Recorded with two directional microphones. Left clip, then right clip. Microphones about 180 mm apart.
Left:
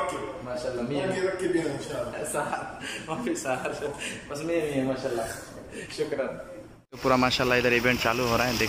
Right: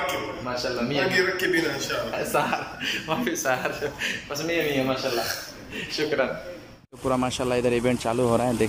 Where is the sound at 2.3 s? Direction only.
Centre (ahead or behind).